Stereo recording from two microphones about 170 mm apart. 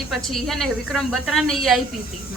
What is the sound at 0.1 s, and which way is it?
A woman's voice, centre (ahead or behind).